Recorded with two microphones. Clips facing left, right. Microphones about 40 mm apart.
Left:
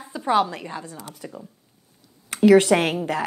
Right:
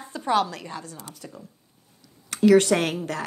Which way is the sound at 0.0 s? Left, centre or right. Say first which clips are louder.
Left 2 dB; centre.